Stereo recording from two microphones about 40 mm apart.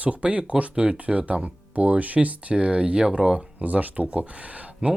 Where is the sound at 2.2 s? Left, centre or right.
Right.